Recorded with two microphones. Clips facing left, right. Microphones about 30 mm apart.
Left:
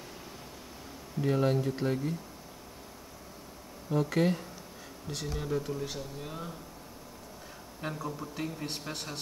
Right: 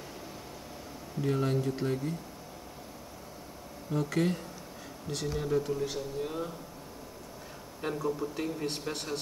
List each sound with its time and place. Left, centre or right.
1.2 s speech: centre
3.9 s speech: centre
7.8 s speech: centre